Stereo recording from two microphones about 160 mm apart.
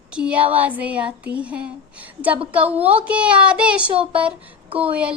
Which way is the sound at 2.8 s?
40° right (ahead or behind).